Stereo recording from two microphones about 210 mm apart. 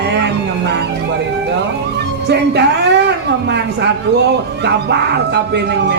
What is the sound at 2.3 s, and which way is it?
Speech, 55° right (ahead or behind).